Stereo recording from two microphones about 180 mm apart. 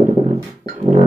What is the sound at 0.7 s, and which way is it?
Music, 40° right (ahead or behind).